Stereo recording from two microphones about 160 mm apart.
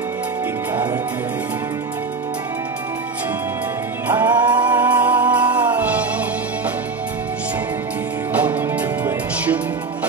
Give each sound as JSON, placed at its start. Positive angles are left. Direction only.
{"t": 4.2, "sound": "music", "side_deg": -25}
{"t": 4.7, "sound": "music", "side_deg": -10}
{"t": 8.3, "sound": "music", "side_deg": -10}